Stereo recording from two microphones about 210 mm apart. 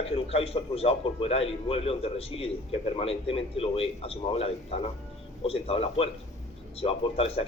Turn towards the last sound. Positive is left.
turn(degrees=30)  # may be behind; listen again after turning